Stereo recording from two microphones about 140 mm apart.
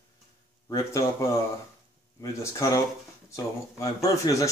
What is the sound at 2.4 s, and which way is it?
Speech, 20° left (ahead or behind).